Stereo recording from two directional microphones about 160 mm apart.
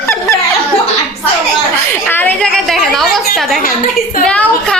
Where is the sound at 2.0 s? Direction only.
10° left (ahead or behind).